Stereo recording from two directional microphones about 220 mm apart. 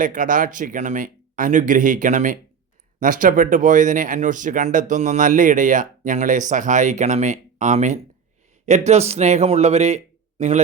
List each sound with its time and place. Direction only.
0.0 s speech: 35° right (ahead or behind)